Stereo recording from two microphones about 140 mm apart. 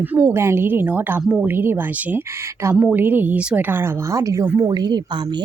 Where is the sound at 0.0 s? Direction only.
15° right (ahead or behind).